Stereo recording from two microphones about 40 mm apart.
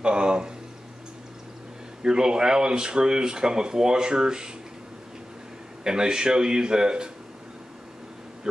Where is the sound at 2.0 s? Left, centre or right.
Centre.